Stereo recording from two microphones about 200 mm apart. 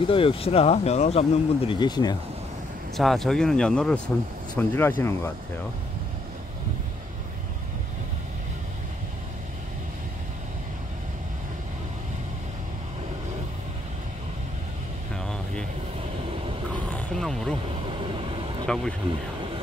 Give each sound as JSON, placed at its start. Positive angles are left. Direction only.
{"t": 0.0, "sound": "speech", "side_deg": 25}
{"t": 3.0, "sound": "speech", "side_deg": 0}
{"t": 15.1, "sound": "air conditioning", "side_deg": 5}
{"t": 16.7, "sound": "roaring cats", "side_deg": 5}
{"t": 17.8, "sound": "vehicle", "side_deg": -25}